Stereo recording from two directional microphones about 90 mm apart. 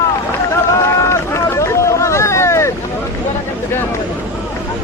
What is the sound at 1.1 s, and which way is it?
Hubbub, 30° left (ahead or behind).